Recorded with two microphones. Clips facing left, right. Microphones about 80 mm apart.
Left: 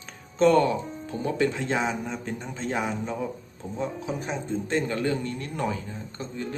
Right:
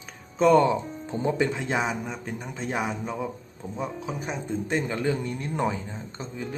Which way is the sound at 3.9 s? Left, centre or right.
Centre.